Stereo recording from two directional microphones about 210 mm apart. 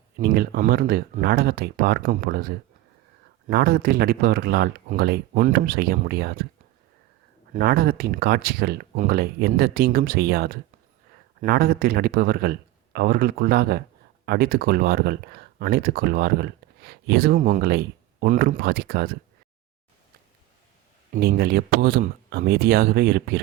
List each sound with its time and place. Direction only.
0.2 s speech: 45° right (ahead or behind)
7.5 s speech: 45° right (ahead or behind)
21.1 s speech: 50° right (ahead or behind)